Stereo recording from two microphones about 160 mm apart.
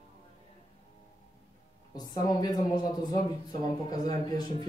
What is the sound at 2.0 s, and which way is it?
Speech, 25° left (ahead or behind).